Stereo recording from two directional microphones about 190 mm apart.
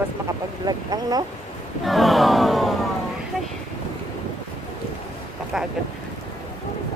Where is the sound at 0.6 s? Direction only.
20° right (ahead or behind).